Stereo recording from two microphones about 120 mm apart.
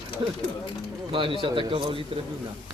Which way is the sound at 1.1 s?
45° right (ahead or behind).